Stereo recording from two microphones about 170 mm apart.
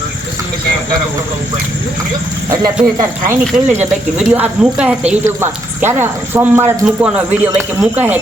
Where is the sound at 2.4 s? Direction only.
15° right (ahead or behind).